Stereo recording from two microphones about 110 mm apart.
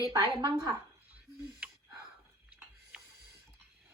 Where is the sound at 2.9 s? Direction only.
10° right (ahead or behind).